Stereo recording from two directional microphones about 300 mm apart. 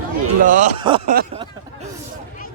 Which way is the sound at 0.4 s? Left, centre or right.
Right.